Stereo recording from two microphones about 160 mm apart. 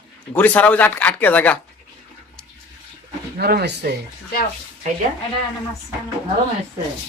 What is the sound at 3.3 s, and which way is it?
Speech, 80° right.